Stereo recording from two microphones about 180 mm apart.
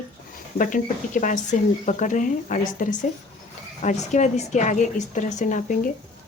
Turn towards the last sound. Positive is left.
turn(degrees=45)  # may be behind; listen again after turning